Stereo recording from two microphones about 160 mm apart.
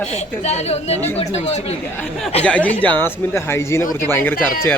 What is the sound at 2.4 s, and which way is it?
Speech, 10° left (ahead or behind).